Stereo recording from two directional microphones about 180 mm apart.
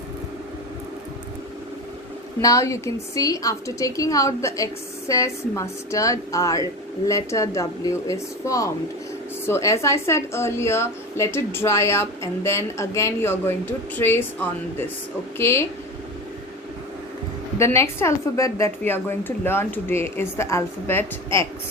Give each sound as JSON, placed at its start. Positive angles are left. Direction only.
{"t": 2.4, "sound": "a woman's voice", "side_deg": 20}
{"t": 17.7, "sound": "a woman's voice", "side_deg": 15}